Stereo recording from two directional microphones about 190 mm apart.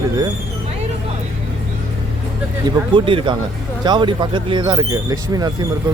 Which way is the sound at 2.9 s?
25° right (ahead or behind).